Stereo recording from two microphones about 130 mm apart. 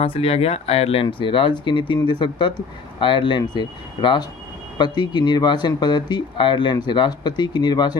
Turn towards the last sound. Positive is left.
turn(degrees=35)  # may be behind; listen again after turning